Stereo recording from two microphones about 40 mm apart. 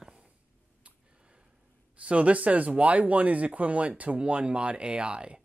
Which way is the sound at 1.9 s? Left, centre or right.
Right.